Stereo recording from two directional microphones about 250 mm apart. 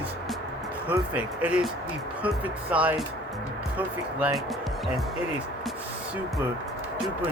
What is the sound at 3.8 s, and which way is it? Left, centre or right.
Speech, centre.